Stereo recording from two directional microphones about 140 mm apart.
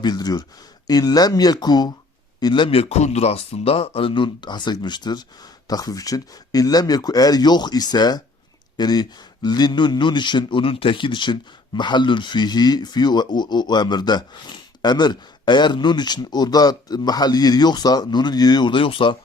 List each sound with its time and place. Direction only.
0.0 s a man's voice: 30° left (ahead or behind)